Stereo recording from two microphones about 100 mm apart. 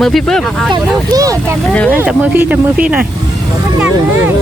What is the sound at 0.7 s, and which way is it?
Speech, 35° right (ahead or behind).